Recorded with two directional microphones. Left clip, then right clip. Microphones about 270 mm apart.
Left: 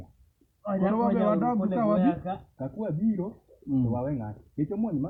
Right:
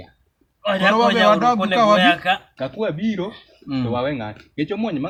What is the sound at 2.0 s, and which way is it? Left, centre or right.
Speech, centre.